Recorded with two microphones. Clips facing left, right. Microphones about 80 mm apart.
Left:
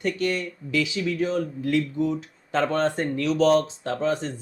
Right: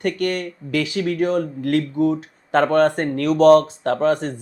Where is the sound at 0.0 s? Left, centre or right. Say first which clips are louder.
Right 4 dB; right.